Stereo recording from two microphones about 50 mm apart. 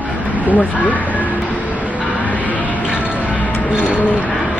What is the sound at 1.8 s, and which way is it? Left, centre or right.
Vehicle, right.